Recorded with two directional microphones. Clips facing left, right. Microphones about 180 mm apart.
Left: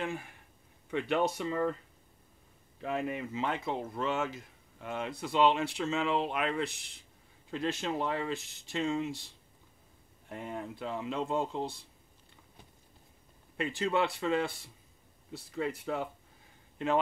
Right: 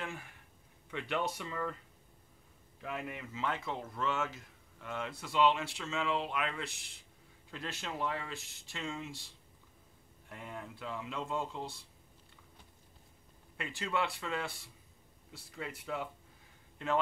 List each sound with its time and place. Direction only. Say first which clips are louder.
0.8 s speech: left 6 dB; 30° left (ahead or behind)
2.8 s speech: left 7 dB; 30° left (ahead or behind)
5.8 s speech: left 5 dB; 35° left (ahead or behind)
10.3 s speech: left 6 dB; 30° left (ahead or behind)
13.6 s speech: left 6 dB; 25° left (ahead or behind)
15.5 s speech: left 6 dB; 35° left (ahead or behind)
16.7 s speech: left 4 dB; 20° left (ahead or behind)